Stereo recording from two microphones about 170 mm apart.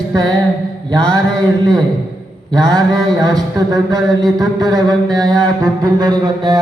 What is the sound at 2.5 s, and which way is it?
Mantra, 20° right (ahead or behind).